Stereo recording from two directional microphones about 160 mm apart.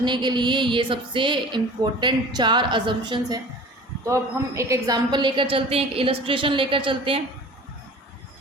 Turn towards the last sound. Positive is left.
turn(degrees=-35)  # may be behind; listen again after turning